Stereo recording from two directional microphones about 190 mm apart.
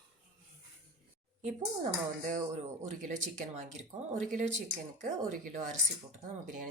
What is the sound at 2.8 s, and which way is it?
Speech, 40° right (ahead or behind).